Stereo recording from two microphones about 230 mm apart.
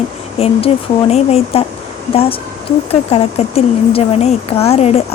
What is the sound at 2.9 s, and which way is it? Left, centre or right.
A woman's voice, left.